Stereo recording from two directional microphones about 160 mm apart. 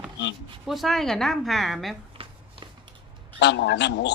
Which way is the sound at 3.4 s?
90° left.